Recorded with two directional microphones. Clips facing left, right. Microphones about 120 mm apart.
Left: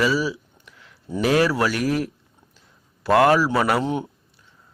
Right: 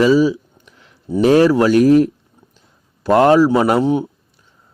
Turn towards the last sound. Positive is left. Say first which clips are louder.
# right 7 dB
turn(degrees=-15)  # may be behind; listen again after turning